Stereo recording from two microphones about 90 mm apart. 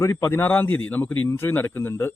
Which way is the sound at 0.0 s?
30° left (ahead or behind).